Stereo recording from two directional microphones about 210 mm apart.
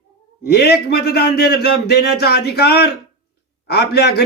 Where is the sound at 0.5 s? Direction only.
50° left (ahead or behind).